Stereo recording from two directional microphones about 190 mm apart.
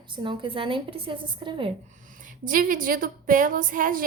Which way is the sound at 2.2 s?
45° right (ahead or behind).